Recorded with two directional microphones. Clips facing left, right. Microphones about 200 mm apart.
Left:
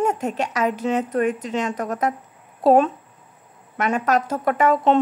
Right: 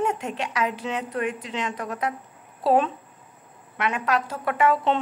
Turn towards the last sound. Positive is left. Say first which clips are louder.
# left 4 dB
turn(degrees=45)  # may be behind; listen again after turning